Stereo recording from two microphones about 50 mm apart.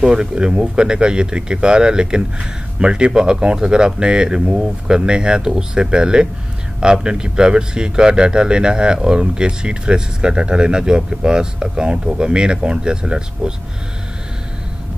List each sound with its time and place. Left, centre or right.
0.0 s a man's voice: centre